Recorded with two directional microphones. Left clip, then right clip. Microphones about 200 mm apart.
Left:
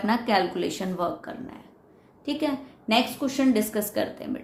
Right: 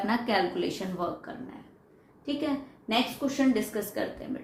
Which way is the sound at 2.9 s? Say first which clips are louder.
Left 4 dB; 50° left (ahead or behind).